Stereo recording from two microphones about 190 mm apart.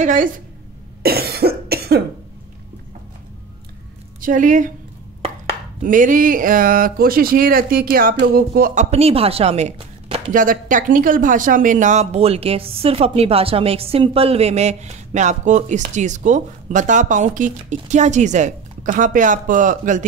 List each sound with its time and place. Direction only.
0.0 s music: 45° right (ahead or behind)
1.0 s cough: 55° right (ahead or behind)
4.2 s music: 45° right (ahead or behind)
5.2 s a sound: 40° right (ahead or behind)
8.2 s music: 50° right (ahead or behind)
8.9 s a woman's voice: 30° right (ahead or behind)
10.3 s speech: 45° right (ahead or behind)